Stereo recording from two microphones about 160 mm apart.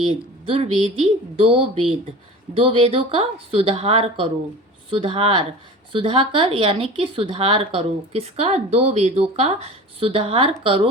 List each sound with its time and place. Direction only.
0.1 s a woman's voice: 35° right (ahead or behind)